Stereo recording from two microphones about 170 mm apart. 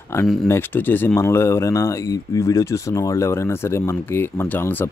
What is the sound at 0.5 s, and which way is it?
Speech, 10° left (ahead or behind).